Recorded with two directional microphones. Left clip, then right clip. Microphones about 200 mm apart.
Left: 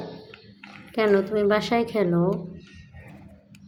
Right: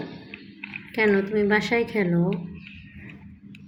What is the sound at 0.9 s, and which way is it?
A woman's voice, 30° left (ahead or behind).